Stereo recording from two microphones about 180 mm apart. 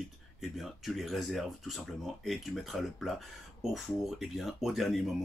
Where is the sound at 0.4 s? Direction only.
Centre (ahead or behind).